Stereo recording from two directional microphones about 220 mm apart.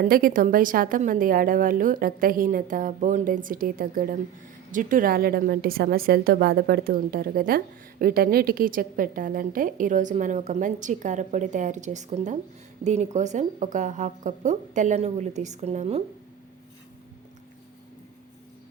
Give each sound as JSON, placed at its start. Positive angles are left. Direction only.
{"t": 0.0, "sound": "a woman's voice", "side_deg": -40}